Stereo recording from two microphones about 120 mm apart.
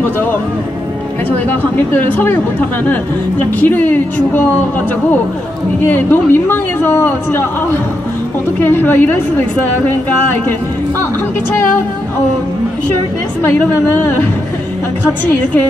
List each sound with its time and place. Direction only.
1.5 s speech: 15° left (ahead or behind)
5.9 s speech: 15° left (ahead or behind)
13.4 s speech: 15° left (ahead or behind)